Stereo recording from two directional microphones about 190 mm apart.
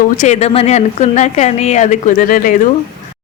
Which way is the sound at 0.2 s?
35° left (ahead or behind).